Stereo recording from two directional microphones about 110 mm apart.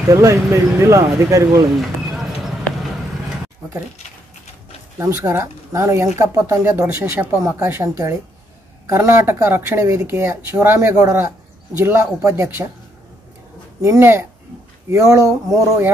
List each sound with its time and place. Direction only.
0.1 s speech: 25° right (ahead or behind)
4.9 s speech: 25° right (ahead or behind)
13.7 s speech: 25° right (ahead or behind)